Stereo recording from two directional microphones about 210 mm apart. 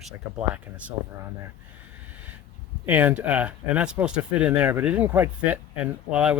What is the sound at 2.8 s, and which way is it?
Speech, 5° right (ahead or behind).